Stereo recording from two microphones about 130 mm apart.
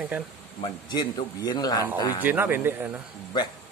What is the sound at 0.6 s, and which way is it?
A man's voice, 35° left (ahead or behind).